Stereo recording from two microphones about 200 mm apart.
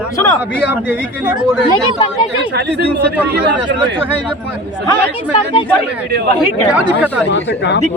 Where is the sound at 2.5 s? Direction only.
55° right (ahead or behind).